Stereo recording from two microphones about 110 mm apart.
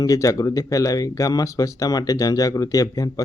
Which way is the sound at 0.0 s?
30° left (ahead or behind).